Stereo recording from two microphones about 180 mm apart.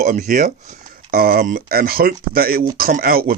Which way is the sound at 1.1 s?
55° right (ahead or behind).